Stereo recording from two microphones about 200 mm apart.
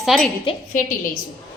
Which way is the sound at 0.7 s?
40° left (ahead or behind).